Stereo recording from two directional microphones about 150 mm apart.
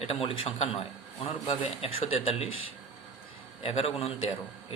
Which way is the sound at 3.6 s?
40° left (ahead or behind).